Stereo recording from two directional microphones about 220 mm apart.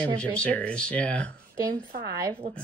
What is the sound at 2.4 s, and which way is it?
Speech, 35° right (ahead or behind).